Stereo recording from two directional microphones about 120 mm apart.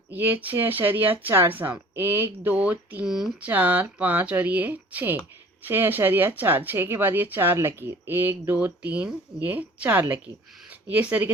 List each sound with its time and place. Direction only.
0.1 s speech: 15° right (ahead or behind)